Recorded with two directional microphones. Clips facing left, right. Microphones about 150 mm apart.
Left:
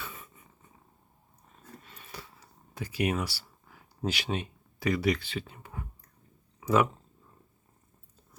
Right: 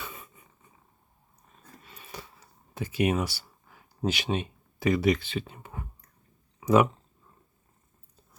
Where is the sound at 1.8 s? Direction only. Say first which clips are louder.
Right 2 dB; 10° right (ahead or behind).